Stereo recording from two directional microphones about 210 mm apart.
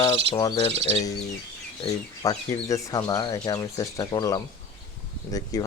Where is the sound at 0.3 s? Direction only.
20° left (ahead or behind).